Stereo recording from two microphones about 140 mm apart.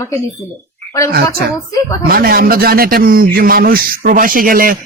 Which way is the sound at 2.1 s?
90° right.